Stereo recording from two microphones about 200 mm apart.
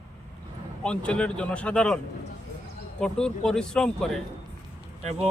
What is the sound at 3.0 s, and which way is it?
Speech, 5° left (ahead or behind).